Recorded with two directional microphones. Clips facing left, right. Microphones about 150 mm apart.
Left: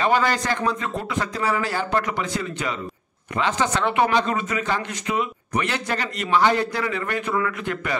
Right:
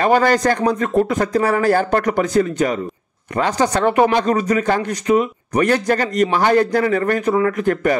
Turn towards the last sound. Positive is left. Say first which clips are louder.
# right 10 dB
turn(degrees=-45)  # may be behind; listen again after turning